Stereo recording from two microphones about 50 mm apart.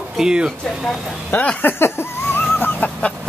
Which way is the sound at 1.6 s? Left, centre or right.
Left.